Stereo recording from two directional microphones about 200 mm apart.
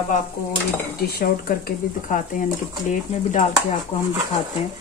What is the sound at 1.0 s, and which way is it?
A woman's voice, 50° left (ahead or behind).